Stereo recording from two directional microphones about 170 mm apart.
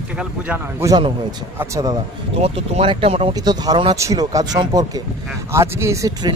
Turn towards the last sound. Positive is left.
turn(degrees=-20)  # may be behind; listen again after turning